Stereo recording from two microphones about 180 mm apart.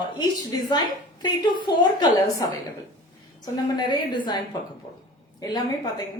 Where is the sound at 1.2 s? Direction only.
25° left (ahead or behind).